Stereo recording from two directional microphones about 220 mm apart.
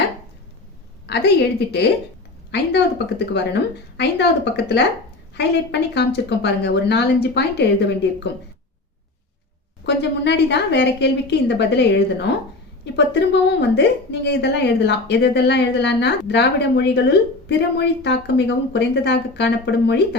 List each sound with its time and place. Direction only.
1.0 s a woman's voice: 50° left (ahead or behind)
9.8 s a woman's voice: 50° left (ahead or behind)